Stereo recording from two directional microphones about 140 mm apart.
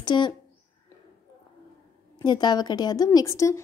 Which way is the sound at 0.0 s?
35° left (ahead or behind).